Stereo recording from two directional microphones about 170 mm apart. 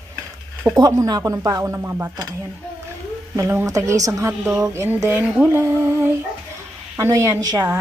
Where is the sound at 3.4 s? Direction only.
15° right (ahead or behind).